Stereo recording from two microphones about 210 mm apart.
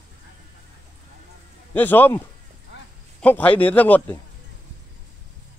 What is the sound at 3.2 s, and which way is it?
A man's voice, 5° left (ahead or behind).